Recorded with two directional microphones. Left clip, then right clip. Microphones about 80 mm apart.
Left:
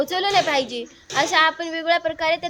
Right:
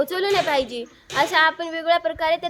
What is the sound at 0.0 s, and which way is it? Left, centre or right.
A woman's voice, right.